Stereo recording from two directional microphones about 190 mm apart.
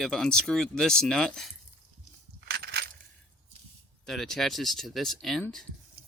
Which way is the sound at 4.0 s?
Centre (ahead or behind).